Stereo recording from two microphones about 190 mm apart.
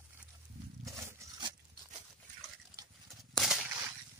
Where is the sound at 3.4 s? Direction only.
5° right (ahead or behind).